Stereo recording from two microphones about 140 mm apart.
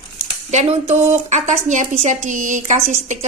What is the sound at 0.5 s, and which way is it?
A woman's voice, 50° right (ahead or behind).